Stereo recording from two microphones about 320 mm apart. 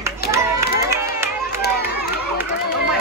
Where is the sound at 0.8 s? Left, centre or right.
Centre.